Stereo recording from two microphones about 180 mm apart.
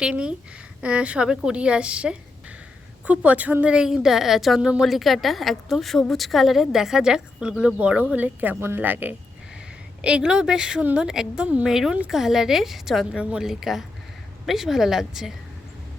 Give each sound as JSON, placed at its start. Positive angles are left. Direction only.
{"t": 0.0, "sound": "a woman's voice", "side_deg": -5}